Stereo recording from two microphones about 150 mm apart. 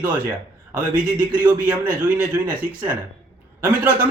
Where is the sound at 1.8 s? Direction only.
10° right (ahead or behind).